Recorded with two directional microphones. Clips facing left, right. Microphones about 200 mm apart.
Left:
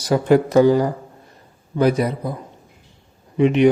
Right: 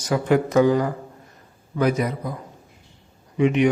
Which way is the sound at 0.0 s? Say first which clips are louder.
Left 4 dB; 35° left (ahead or behind).